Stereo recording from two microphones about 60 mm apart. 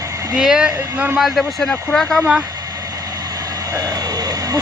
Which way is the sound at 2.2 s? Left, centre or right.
Centre.